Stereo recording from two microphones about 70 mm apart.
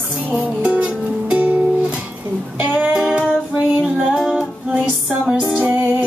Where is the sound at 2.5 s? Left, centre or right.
Centre.